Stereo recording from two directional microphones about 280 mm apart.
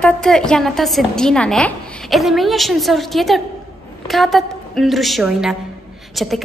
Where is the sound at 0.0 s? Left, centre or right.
Centre.